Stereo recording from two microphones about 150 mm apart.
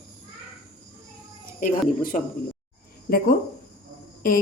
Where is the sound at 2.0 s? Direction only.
65° left (ahead or behind).